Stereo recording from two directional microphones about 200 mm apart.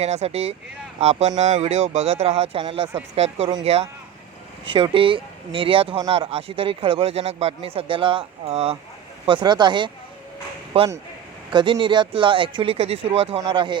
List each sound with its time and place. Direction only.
0.0 s speech: 30° right (ahead or behind)